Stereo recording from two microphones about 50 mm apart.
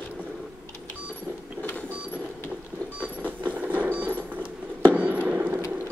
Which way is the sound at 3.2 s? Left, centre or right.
Right.